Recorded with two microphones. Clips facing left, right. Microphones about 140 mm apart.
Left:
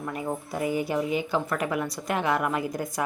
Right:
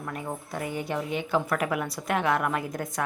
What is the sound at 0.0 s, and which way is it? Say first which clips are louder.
Speech: left 3 dB; 5° left (ahead or behind).